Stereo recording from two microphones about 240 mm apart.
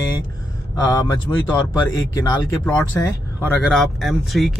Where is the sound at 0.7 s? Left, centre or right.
Centre.